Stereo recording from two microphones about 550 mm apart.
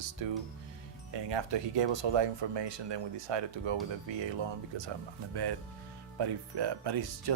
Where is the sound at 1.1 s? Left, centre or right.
Right.